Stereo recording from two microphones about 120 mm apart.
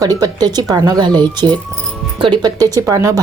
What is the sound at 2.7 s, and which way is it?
Speech, 25° right (ahead or behind).